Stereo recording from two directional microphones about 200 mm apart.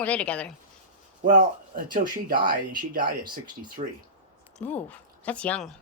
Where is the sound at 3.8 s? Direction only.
30° right (ahead or behind).